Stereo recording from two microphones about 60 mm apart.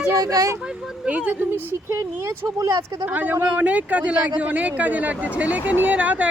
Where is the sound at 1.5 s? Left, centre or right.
Right.